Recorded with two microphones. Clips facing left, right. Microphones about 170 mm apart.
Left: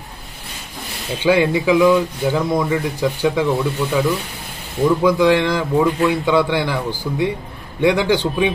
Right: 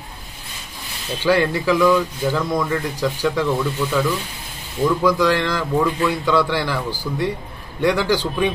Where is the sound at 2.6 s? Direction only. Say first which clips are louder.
Left 3 dB; 10° left (ahead or behind).